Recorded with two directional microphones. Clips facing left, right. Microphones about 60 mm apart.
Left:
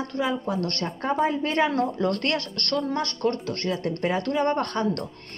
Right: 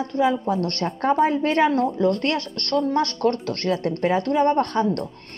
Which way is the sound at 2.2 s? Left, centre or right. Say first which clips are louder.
Right 3 dB; centre.